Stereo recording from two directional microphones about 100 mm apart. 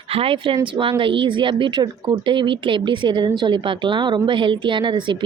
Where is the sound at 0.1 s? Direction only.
70° right (ahead or behind).